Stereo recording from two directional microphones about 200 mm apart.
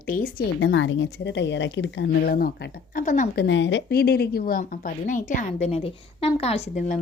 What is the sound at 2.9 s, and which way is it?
Speech, 40° left (ahead or behind).